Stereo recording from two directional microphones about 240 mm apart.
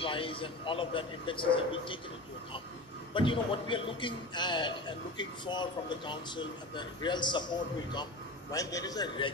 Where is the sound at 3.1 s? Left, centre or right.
Left.